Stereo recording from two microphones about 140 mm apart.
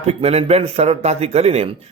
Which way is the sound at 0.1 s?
45° right (ahead or behind).